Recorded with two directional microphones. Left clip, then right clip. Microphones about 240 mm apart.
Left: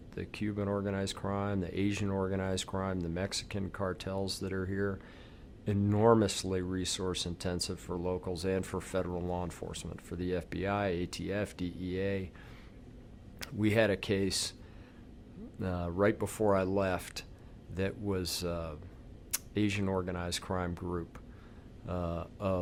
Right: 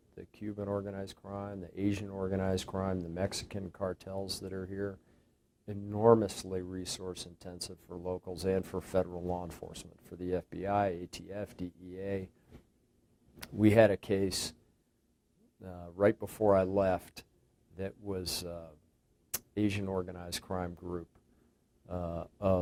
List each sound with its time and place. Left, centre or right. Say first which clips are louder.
0.2 s speech: left 5 dB; left
5.9 s speech: right 1 dB; left
6.1 s speech: left 3 dB; left
13.4 s speech: right 5 dB; left
15.6 s speech: right 1 dB; left